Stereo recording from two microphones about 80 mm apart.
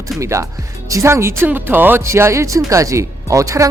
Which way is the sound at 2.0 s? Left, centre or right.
Right.